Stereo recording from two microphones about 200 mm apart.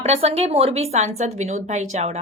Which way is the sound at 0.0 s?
30° right (ahead or behind).